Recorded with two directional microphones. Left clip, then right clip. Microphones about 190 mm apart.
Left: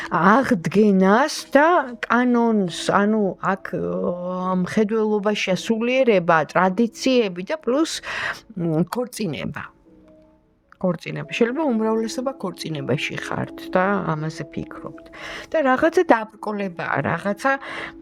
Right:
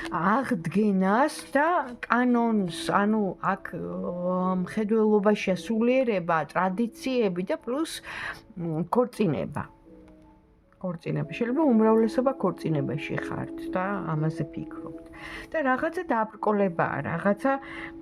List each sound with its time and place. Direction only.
0.1 s a woman's voice: 50° left (ahead or behind)
10.8 s speech: 50° left (ahead or behind)
12.2 s speech: centre (ahead or behind)
12.5 s speech: 50° left (ahead or behind)